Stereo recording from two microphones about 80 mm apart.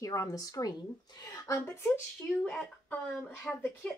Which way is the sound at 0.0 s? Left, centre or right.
Left.